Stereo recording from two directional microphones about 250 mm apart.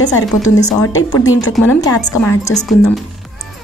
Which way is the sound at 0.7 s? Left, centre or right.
Centre.